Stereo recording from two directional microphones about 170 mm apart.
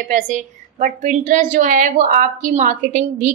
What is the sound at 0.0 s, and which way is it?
A woman's voice, 50° right (ahead or behind).